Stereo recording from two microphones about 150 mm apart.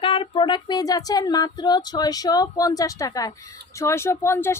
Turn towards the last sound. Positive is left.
turn(degrees=15)  # may be behind; listen again after turning